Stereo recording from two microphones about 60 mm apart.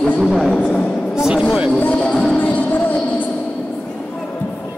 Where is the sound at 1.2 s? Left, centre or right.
Centre.